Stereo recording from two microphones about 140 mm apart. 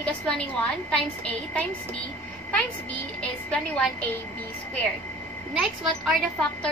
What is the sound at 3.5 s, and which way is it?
Speech, 10° left (ahead or behind).